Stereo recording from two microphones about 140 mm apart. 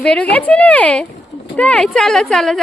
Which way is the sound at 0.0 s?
10° left (ahead or behind).